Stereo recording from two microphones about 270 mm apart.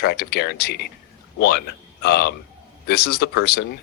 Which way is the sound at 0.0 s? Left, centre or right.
Left.